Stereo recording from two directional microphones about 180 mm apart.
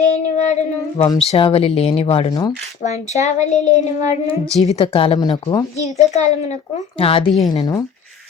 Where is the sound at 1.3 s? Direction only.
30° left (ahead or behind).